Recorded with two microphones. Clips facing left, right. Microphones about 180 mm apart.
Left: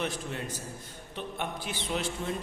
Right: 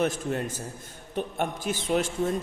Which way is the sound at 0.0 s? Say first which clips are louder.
Right 7 dB; 45° right (ahead or behind).